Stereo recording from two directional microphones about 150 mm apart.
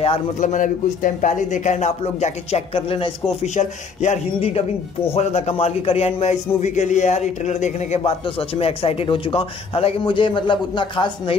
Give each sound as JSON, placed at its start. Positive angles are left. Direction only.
{"t": 0.4, "sound": "a man's voice", "side_deg": 55}
{"t": 3.5, "sound": "a man's voice", "side_deg": 50}